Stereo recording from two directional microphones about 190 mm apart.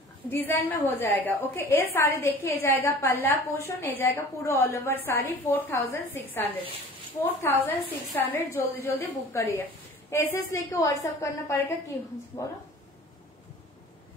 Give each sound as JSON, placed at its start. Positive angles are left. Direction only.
{"t": 0.3, "sound": "a woman's voice", "side_deg": 10}